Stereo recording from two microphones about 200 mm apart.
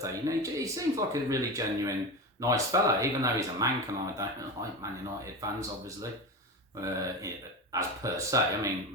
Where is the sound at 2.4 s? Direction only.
15° right (ahead or behind).